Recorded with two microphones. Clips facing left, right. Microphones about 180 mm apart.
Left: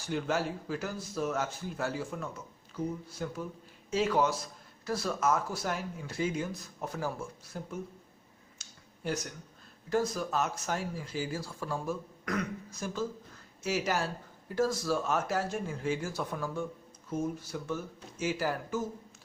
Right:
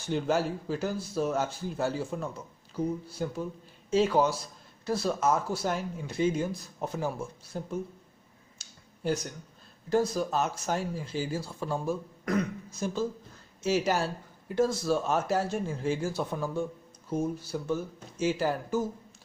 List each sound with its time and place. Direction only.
0.0 s speech: 30° right (ahead or behind)
8.6 s a sound: 35° right (ahead or behind)
9.9 s speech: 30° right (ahead or behind)